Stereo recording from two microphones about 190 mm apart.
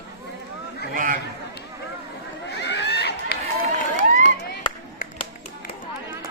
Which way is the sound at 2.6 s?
65° left (ahead or behind).